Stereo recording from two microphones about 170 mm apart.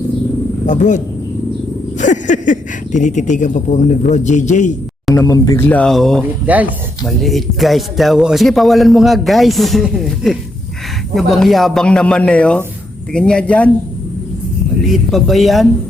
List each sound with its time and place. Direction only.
0.6 s speech: 45° left (ahead or behind)
5.1 s speech: 20° left (ahead or behind); by 6.2 s centre (ahead or behind)
6.4 s speech: 10° right (ahead or behind); by 13.7 s 5° left (ahead or behind)
14.8 s speech: centre (ahead or behind)